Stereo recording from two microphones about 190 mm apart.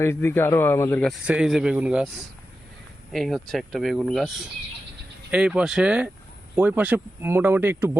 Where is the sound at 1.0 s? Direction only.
5° right (ahead or behind).